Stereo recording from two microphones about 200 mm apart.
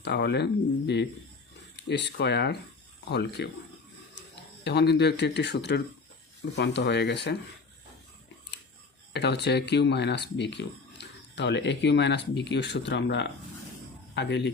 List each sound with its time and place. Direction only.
0.0 s speech: 60° left (ahead or behind)
4.6 s speech: 55° left (ahead or behind)
9.1 s speech: 55° left (ahead or behind)